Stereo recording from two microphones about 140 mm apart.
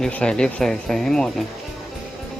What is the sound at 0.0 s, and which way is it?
Speech, 5° left (ahead or behind).